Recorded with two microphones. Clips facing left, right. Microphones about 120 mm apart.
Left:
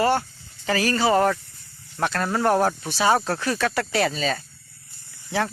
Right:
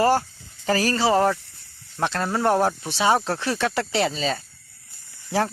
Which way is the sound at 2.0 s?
25° right (ahead or behind).